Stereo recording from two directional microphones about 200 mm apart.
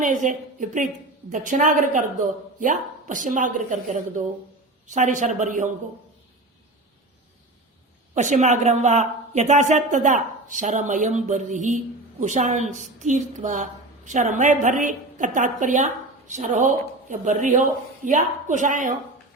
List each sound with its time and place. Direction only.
0.0 s a woman's voice: 40° right (ahead or behind)
8.1 s a woman's voice: 35° right (ahead or behind)